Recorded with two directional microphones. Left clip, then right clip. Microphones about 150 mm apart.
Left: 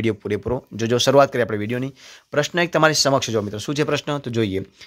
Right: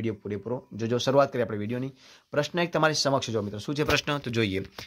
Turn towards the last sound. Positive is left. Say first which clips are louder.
# left 5 dB
turn(degrees=25)  # may be behind; listen again after turning